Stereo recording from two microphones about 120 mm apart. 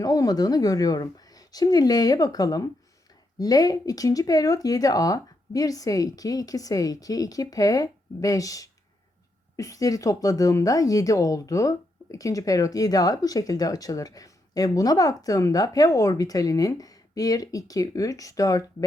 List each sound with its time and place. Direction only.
0.0 s speech: 30° left (ahead or behind)